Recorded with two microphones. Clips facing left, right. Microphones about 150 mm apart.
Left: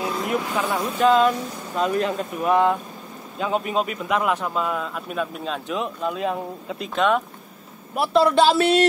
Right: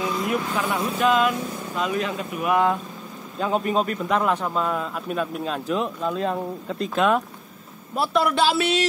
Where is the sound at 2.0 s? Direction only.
30° left (ahead or behind).